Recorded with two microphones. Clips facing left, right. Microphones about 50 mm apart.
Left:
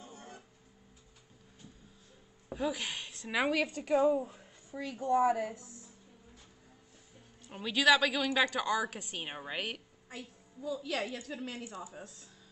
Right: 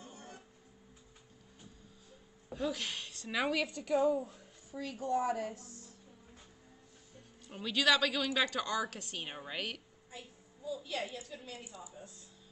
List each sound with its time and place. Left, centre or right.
0.0 s a sound: left
2.5 s a woman's voice: centre
3.8 s a woman's voice: left; by 5.9 s centre
7.4 s a woman's voice: centre
10.0 s a woman's voice: left